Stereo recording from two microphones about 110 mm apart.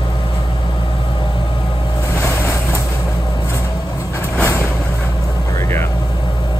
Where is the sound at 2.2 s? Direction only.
25° left (ahead or behind).